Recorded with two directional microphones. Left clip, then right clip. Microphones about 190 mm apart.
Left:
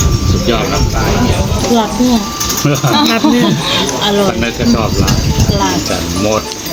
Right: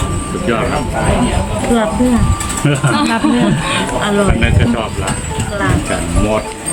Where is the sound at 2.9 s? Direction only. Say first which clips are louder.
Left 4 dB; 20° right (ahead or behind).